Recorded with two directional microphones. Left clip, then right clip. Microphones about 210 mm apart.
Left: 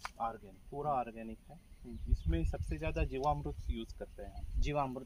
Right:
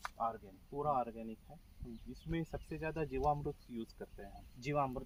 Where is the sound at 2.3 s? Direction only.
25° left (ahead or behind).